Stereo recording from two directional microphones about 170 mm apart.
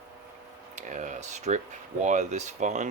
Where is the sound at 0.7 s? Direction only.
45° right (ahead or behind).